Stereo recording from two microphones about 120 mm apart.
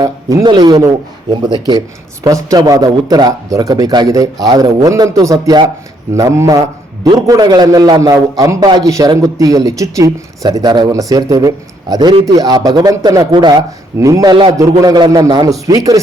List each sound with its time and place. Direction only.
0.0 s a man's voice: 30° right (ahead or behind)